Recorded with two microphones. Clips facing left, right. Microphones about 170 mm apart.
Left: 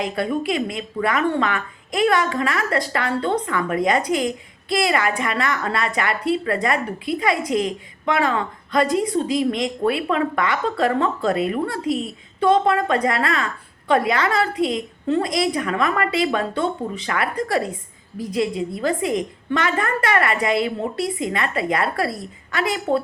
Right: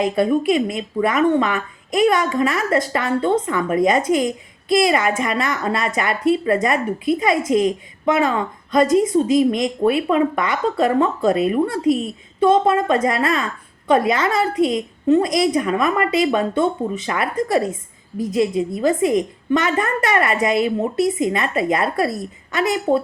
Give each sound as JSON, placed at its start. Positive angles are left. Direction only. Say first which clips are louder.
{"t": 0.0, "sound": "speech", "louder": "right 6 dB", "side_deg": -20}